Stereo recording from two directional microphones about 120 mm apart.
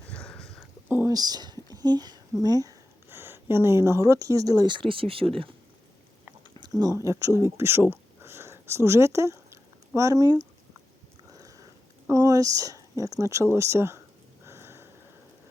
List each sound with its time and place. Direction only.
0.1 s a sound: 10° left (ahead or behind)
0.9 s speech: 15° right (ahead or behind)
1.1 s speech: 35° right (ahead or behind); by 5.3 s 50° right (ahead or behind)
6.6 s speech: 30° right (ahead or behind)
11.3 s a sound: 30° right (ahead or behind)
14.4 s sniff: 20° right (ahead or behind)